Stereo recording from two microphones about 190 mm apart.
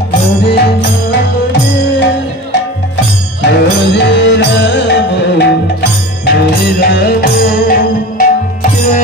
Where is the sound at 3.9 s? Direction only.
65° left (ahead or behind).